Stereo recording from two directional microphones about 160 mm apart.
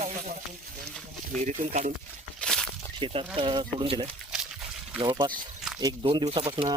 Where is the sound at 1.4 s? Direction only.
50° right (ahead or behind).